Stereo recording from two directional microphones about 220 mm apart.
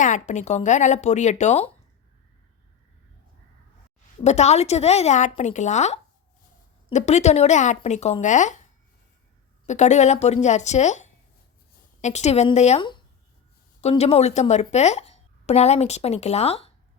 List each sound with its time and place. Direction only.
0.0 s a woman's voice: 35° left (ahead or behind)
4.2 s a woman's voice: 30° left (ahead or behind)
9.6 s a woman's voice: 30° left (ahead or behind)